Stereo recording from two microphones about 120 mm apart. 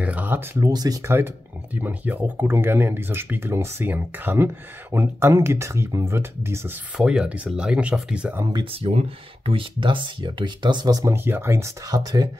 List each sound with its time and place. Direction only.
0.0 s a sound: 15° right (ahead or behind)
0.6 s speech: 30° right (ahead or behind)
1.1 s speech: 15° right (ahead or behind)
7.0 s speech: 5° right (ahead or behind)
8.6 s speech: 55° right (ahead or behind); by 11.1 s 30° right (ahead or behind)
11.1 s speech: 20° right (ahead or behind)